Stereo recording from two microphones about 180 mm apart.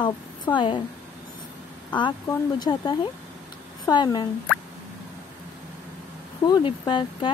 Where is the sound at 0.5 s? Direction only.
25° left (ahead or behind).